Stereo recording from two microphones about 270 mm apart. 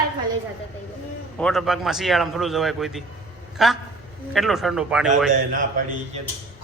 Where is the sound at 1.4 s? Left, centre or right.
Centre.